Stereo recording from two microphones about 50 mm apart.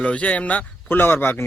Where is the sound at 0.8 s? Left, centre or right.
Left.